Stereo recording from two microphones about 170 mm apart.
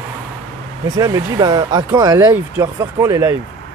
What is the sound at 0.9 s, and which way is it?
Speech, 20° right (ahead or behind).